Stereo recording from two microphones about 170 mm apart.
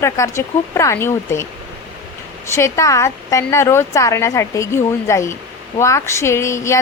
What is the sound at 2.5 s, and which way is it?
A woman's voice, 15° left (ahead or behind).